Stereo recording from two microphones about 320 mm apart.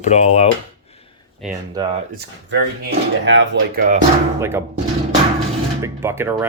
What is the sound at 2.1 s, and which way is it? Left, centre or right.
Speech, right.